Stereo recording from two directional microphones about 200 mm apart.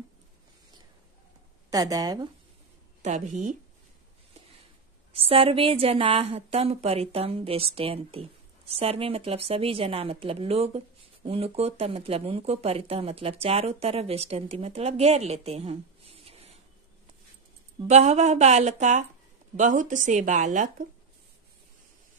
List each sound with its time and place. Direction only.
1.7 s speech: 20° right (ahead or behind)
3.0 s speech: 35° right (ahead or behind)
5.1 s a woman's voice: 30° right (ahead or behind)
17.8 s speech: 35° right (ahead or behind)